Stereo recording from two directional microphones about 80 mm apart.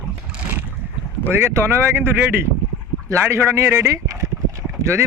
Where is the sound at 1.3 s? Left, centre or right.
Right.